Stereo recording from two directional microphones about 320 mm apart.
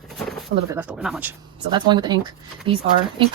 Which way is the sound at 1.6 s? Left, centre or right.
Centre.